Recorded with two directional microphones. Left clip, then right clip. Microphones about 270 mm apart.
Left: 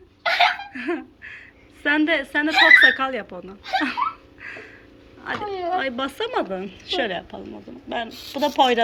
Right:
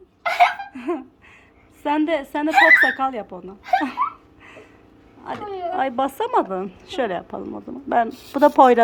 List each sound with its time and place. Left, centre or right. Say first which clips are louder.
0.2 s chicken: right 2 dB; centre
1.8 s speech: left 1 dB; centre
2.8 s speech: left 2 dB; centre
5.2 s speech: left 1 dB; centre
7.3 s speech: right 5 dB; right
8.4 s speech: right 6 dB; centre